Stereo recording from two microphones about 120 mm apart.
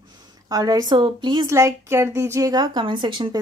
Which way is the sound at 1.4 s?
25° right (ahead or behind).